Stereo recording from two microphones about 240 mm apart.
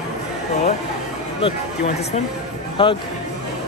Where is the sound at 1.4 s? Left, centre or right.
Left.